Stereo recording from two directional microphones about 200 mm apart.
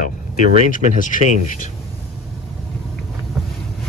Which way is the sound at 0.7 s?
40° left (ahead or behind).